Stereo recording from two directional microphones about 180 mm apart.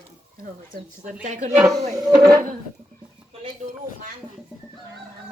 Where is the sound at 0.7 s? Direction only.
45° right (ahead or behind).